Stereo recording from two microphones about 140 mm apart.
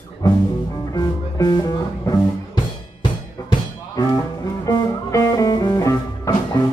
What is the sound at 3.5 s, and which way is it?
Music, 30° left (ahead or behind).